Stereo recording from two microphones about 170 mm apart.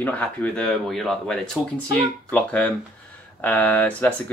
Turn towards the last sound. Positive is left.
turn(degrees=10)  # may be behind; listen again after turning